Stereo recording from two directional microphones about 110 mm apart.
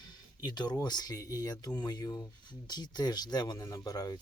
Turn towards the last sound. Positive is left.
turn(degrees=35)  # may be behind; listen again after turning